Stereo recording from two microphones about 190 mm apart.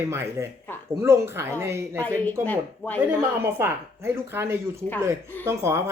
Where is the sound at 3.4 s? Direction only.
10° right (ahead or behind).